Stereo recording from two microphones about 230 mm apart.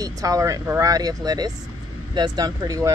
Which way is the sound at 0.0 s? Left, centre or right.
Centre.